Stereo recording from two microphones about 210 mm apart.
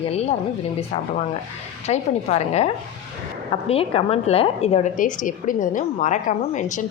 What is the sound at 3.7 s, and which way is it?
A woman's voice, 25° left (ahead or behind).